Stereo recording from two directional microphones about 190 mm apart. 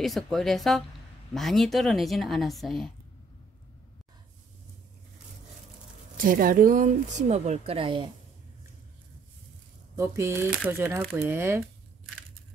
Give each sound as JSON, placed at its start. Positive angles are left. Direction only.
{"t": 0.0, "sound": "speech", "side_deg": 0}
{"t": 6.1, "sound": "a woman's voice", "side_deg": -45}
{"t": 9.9, "sound": "speech", "side_deg": -15}